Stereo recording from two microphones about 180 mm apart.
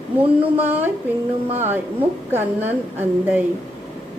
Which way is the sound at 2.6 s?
35° right (ahead or behind).